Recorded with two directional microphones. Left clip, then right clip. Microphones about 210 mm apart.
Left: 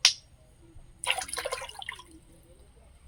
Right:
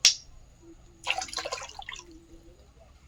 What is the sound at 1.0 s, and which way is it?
Drip, 20° left (ahead or behind).